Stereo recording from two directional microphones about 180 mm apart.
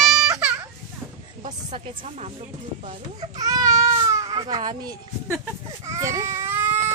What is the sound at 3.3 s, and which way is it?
Speech, 20° right (ahead or behind).